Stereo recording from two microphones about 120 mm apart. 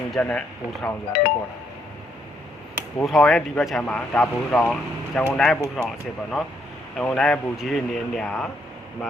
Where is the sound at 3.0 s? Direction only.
Centre (ahead or behind).